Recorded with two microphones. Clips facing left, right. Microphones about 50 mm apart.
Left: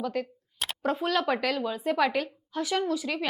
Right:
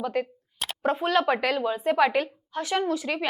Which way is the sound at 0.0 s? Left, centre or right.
Centre.